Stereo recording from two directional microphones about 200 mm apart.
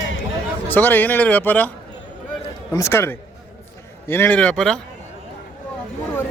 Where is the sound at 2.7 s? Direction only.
15° left (ahead or behind).